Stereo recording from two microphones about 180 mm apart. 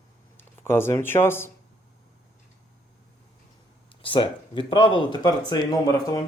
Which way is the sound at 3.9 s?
30° left (ahead or behind).